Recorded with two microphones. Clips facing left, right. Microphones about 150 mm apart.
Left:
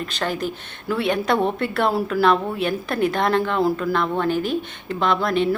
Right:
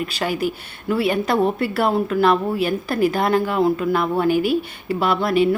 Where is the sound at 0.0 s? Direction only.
10° right (ahead or behind).